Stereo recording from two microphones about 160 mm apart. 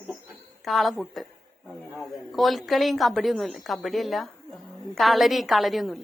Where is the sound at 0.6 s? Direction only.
Centre (ahead or behind).